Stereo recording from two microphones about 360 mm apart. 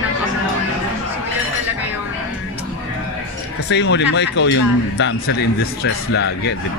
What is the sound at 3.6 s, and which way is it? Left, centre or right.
A man's voice, left.